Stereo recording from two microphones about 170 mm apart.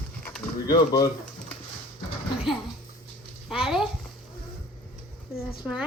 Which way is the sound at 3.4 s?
Centre (ahead or behind).